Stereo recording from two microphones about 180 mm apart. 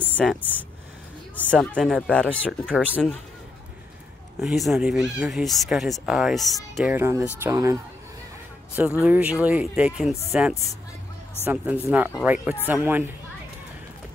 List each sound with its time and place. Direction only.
0.2 s speech: centre (ahead or behind)
2.7 s speech: 10° right (ahead or behind)
4.4 s speech: centre (ahead or behind)
6.9 s speech: 15° right (ahead or behind)
9.0 s speech: 10° right (ahead or behind)